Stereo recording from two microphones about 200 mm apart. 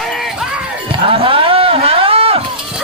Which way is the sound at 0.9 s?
25° right (ahead or behind).